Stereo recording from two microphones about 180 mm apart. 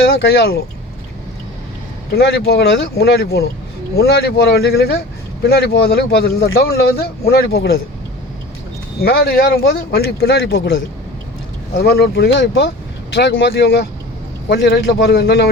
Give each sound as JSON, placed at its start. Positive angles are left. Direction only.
{"t": 0.0, "sound": "speech", "side_deg": 60}
{"t": 2.1, "sound": "speech", "side_deg": 60}
{"t": 9.0, "sound": "speech", "side_deg": 55}
{"t": 11.8, "sound": "speech", "side_deg": 65}
{"t": 13.1, "sound": "speech", "side_deg": 75}